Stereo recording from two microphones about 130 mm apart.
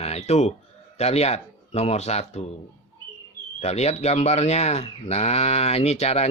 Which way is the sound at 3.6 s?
55° left (ahead or behind).